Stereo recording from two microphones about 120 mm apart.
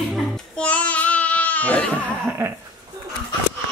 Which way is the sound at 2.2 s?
20° right (ahead or behind).